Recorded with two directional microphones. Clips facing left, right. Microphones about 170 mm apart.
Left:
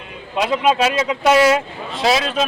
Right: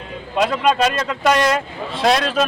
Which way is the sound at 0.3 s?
5° left (ahead or behind).